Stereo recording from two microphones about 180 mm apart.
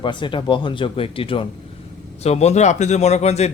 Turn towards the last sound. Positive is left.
turn(degrees=35)  # may be behind; listen again after turning